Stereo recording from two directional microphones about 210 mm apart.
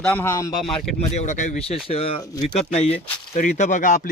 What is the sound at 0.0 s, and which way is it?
Speech, 10° left (ahead or behind).